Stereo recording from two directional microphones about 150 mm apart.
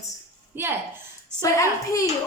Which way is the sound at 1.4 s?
20° left (ahead or behind).